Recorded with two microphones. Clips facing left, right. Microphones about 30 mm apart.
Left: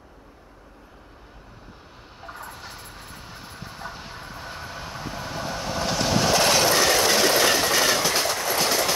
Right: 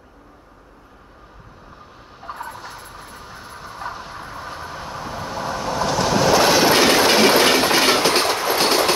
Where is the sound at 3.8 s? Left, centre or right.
Right.